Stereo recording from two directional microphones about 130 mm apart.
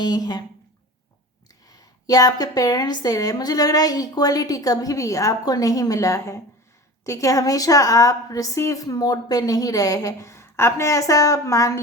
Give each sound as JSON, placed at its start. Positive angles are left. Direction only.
{"t": 0.0, "sound": "speech", "side_deg": 30}
{"t": 1.7, "sound": "a woman's voice", "side_deg": 30}